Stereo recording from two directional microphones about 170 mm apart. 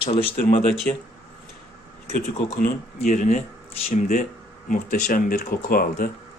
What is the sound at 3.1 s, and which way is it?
Speech, 50° left (ahead or behind).